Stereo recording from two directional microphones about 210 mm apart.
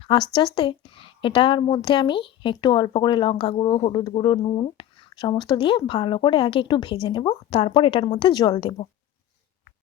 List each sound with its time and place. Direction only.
0.0 s a woman's voice: 20° left (ahead or behind)